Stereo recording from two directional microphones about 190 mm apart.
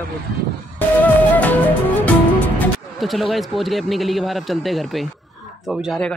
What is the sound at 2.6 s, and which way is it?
Speech, centre (ahead or behind).